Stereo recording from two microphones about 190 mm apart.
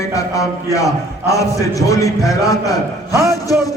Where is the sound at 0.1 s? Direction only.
15° left (ahead or behind).